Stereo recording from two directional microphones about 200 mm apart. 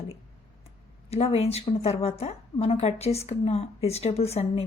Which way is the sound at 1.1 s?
30° left (ahead or behind).